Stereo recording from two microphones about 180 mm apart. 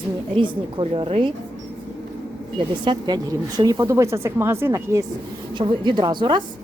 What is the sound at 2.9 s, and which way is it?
Speech, 25° right (ahead or behind).